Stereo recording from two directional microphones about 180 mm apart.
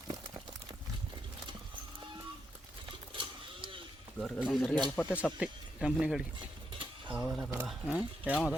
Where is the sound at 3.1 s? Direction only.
30° right (ahead or behind).